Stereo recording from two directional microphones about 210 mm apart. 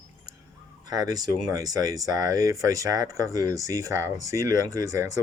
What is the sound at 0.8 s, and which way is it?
Speech, 20° right (ahead or behind).